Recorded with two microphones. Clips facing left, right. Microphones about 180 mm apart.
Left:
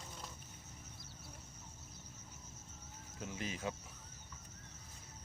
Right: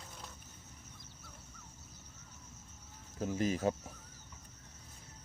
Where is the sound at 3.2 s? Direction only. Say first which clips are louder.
Right 10 dB; 40° right (ahead or behind).